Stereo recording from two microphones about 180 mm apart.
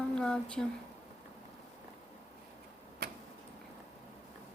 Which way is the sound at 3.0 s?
60° right (ahead or behind).